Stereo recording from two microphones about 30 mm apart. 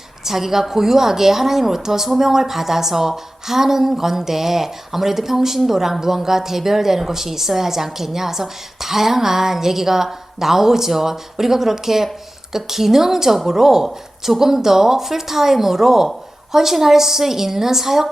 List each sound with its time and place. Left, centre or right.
0.3 s a woman's voice: centre